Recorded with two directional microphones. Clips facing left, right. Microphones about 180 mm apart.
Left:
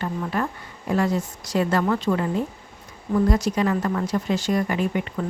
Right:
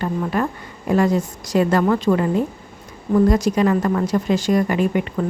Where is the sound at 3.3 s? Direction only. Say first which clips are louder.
Right 5 dB; 90° right.